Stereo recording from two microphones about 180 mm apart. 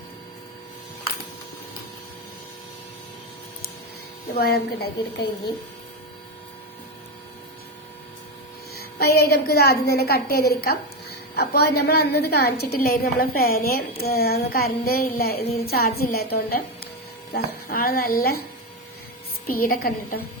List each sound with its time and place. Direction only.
4.4 s a woman's voice: 60° left (ahead or behind)
8.7 s a woman's voice: 60° left (ahead or behind)
19.5 s a woman's voice: 55° left (ahead or behind)